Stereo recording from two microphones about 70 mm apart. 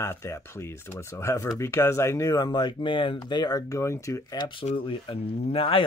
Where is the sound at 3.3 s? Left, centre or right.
Left.